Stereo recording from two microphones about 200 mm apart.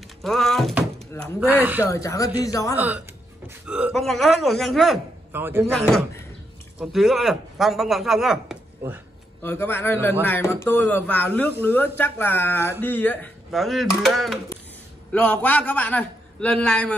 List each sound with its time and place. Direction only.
0.2 s thunk: centre (ahead or behind)
1.5 s speech: 10° right (ahead or behind)
1.9 s a man's voice: 15° left (ahead or behind)
3.6 s speech: 5° right (ahead or behind)
5.3 s speech: 10° right (ahead or behind)
5.7 s speech: centre (ahead or behind)
9.4 s a man's voice: 10° left (ahead or behind)